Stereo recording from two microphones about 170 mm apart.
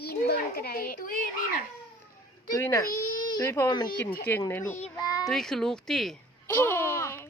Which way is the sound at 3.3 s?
20° left (ahead or behind).